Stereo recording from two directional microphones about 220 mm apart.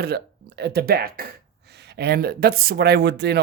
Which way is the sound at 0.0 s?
50° right (ahead or behind).